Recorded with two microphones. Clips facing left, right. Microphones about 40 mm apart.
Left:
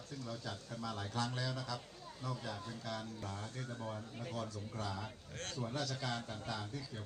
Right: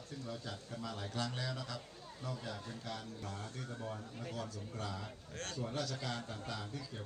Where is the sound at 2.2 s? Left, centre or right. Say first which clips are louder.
Left 1 dB; right.